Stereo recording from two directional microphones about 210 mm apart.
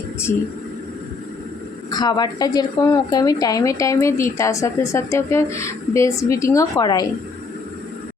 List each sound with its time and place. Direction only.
1.9 s speech: 20° left (ahead or behind)